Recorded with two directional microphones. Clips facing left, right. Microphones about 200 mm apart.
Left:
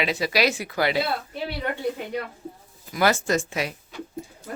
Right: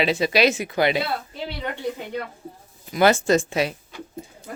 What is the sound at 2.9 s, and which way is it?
Speech, 25° right (ahead or behind).